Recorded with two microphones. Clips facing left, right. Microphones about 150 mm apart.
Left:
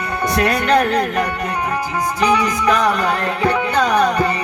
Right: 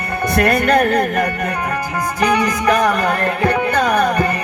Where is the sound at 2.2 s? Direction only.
55° right (ahead or behind).